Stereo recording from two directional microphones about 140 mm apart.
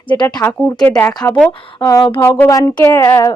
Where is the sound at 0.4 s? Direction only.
10° left (ahead or behind).